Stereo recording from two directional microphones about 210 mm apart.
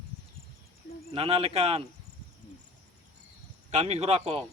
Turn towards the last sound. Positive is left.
turn(degrees=-30)  # may be behind; listen again after turning